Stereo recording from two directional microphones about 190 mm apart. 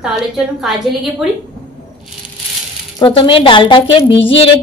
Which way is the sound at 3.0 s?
25° left (ahead or behind).